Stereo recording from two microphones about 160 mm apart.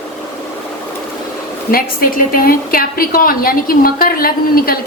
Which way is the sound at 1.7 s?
65° left (ahead or behind).